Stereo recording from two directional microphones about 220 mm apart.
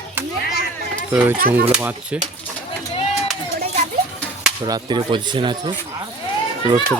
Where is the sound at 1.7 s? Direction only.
5° right (ahead or behind).